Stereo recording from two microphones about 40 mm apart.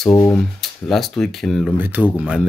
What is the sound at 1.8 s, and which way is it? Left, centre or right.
Speech, right.